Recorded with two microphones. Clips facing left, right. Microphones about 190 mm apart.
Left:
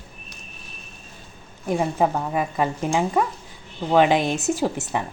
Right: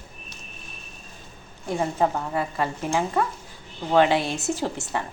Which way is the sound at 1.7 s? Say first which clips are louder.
Left 2 dB; 15° left (ahead or behind).